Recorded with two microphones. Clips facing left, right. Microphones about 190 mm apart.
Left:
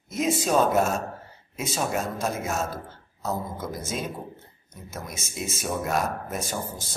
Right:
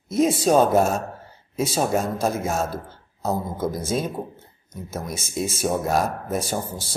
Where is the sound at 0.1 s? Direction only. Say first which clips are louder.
Right 6 dB; 35° right (ahead or behind).